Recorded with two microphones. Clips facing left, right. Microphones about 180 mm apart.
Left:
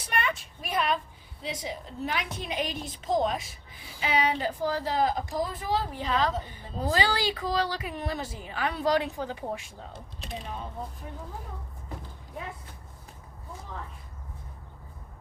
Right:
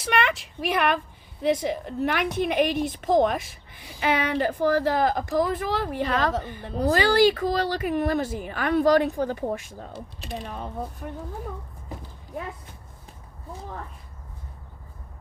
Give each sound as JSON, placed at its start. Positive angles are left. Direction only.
{"t": 0.0, "sound": "a woman's voice", "side_deg": -80}
{"t": 1.4, "sound": "speech", "side_deg": -60}
{"t": 6.9, "sound": "speech", "side_deg": -50}